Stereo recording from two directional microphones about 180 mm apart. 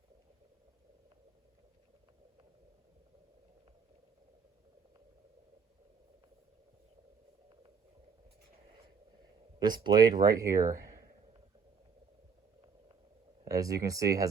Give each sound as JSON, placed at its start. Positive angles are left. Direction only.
{"t": 9.6, "sound": "speech", "side_deg": -25}
{"t": 13.4, "sound": "speech", "side_deg": -20}